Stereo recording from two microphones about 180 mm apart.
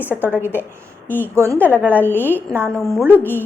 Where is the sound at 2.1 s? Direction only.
10° left (ahead or behind).